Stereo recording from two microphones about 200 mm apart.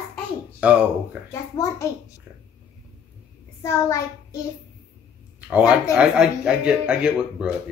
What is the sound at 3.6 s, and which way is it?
Speech, 15° left (ahead or behind).